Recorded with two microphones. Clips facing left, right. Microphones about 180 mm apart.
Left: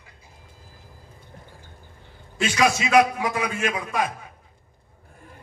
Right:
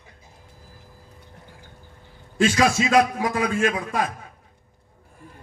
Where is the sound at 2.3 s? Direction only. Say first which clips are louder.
Right 3 dB; 45° right (ahead or behind).